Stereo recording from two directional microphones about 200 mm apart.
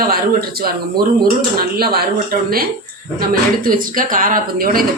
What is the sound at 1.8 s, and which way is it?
Speech, 50° right (ahead or behind).